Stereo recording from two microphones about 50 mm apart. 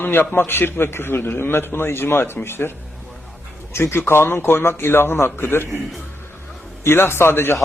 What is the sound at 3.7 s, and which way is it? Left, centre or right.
A man's voice, left.